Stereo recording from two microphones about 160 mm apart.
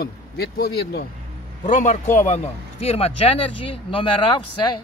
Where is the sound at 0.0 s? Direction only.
80° left.